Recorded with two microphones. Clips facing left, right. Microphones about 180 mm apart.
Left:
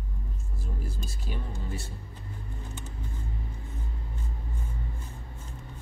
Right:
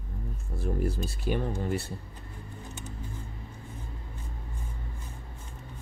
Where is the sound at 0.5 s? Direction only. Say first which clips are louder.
Right 10 dB; 60° right (ahead or behind).